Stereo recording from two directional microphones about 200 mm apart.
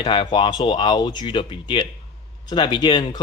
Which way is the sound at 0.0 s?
25° left (ahead or behind).